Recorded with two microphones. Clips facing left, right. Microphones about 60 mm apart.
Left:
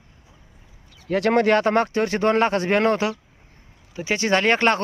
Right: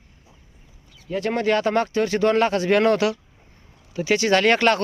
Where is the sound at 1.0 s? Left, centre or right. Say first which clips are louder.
Left 4 dB; left.